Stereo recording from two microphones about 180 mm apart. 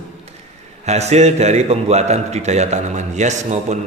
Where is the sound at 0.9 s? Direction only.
40° right (ahead or behind).